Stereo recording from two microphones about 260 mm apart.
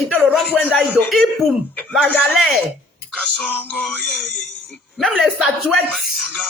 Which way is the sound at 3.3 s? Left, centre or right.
Centre.